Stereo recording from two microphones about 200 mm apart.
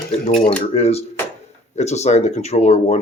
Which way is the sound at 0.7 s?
30° left (ahead or behind).